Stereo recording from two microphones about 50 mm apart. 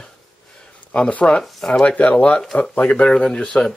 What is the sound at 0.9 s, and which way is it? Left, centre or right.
Speech, left.